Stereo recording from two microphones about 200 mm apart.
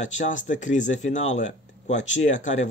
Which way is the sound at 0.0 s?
40° left (ahead or behind).